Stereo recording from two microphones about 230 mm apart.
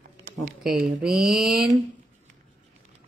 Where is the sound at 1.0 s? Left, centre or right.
Centre.